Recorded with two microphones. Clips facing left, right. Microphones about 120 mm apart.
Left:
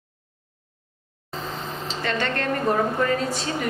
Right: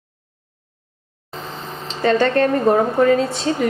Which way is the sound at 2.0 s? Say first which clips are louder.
Right 11 dB; 30° right (ahead or behind).